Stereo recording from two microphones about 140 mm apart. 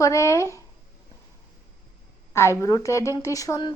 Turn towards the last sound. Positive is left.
turn(degrees=25)  # may be behind; listen again after turning